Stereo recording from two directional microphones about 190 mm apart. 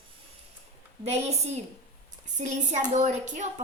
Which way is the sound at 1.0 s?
35° right (ahead or behind).